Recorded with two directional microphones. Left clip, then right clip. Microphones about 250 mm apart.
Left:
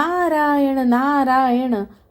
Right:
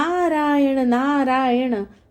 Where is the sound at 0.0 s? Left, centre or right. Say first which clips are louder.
Left 2 dB; centre.